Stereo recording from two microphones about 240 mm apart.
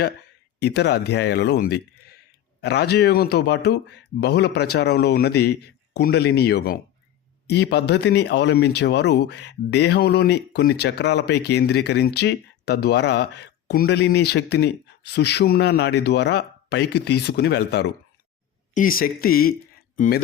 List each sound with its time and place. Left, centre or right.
0.6 s speech: left